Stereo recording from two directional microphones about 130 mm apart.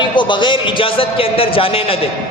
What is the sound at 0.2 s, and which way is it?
A man's voice, 40° left (ahead or behind).